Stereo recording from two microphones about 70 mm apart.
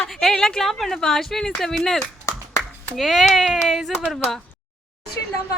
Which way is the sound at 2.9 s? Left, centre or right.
Centre.